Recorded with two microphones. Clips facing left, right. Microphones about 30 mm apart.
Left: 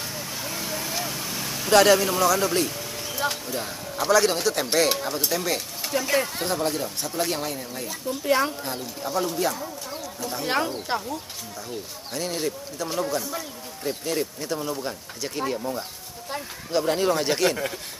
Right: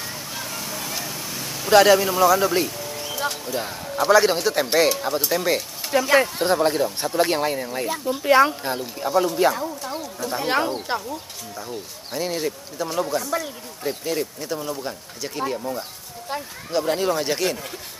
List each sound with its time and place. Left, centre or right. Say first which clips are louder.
0.3 s vehicle: even; centre
1.7 s speech: right 3 dB; centre
2.8 s a sound: right 3 dB; centre
3.2 s speech: even; centre
3.5 s speech: right 4 dB; centre
9.5 s speech: right 6 dB; right
10.4 s speech: right 3 dB; centre
12.1 s speech: right 3 dB; centre